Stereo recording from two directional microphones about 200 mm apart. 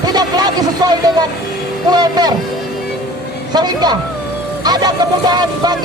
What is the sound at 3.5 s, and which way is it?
Speech, 20° right (ahead or behind).